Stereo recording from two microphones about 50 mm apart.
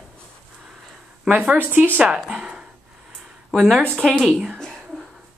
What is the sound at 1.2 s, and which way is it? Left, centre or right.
Speech, right.